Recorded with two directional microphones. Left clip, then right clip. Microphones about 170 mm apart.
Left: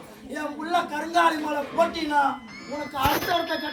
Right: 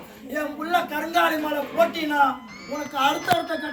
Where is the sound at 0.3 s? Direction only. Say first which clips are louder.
Right 2 dB; 5° right (ahead or behind).